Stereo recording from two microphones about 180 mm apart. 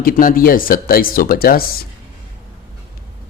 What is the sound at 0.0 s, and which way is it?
Speech, 50° left (ahead or behind).